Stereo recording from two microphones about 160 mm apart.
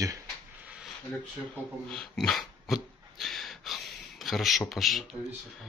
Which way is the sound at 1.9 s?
5° left (ahead or behind).